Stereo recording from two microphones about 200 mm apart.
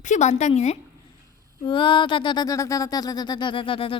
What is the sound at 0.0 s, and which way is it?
Speech, 35° left (ahead or behind).